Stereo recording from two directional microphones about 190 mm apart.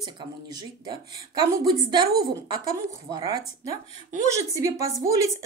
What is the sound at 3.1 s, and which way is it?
A woman's voice, 20° right (ahead or behind).